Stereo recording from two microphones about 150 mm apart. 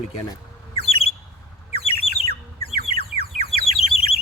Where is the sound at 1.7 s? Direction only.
40° left (ahead or behind).